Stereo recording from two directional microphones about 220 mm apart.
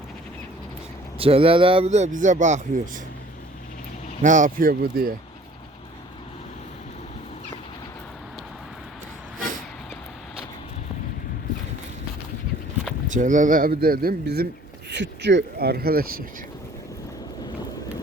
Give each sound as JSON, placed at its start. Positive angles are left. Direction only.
{"t": 1.2, "sound": "speech", "side_deg": -25}
{"t": 4.2, "sound": "speech", "side_deg": -35}
{"t": 13.1, "sound": "speech", "side_deg": -35}